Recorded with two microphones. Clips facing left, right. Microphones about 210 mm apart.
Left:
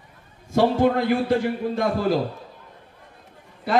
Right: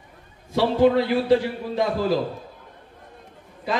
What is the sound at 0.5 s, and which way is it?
A man's voice, 50° left (ahead or behind).